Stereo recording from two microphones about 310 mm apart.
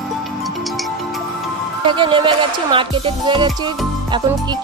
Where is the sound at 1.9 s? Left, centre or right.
Centre.